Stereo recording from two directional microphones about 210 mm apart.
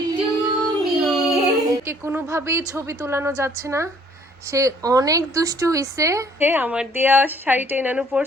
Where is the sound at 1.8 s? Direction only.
15° right (ahead or behind).